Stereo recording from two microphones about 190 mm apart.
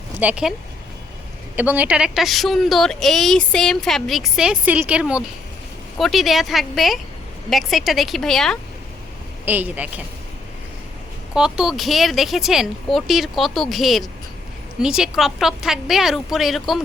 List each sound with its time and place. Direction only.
0.2 s a woman's voice: 5° right (ahead or behind)
1.5 s a woman's voice: 10° right (ahead or behind)
9.5 s a woman's voice: 10° right (ahead or behind)
11.3 s a woman's voice: 5° right (ahead or behind)